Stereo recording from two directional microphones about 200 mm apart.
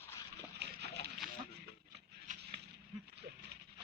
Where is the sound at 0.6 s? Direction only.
55° right (ahead or behind).